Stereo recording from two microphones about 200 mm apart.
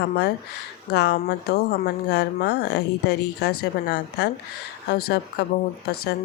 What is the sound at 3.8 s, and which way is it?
Speech, 60° left (ahead or behind).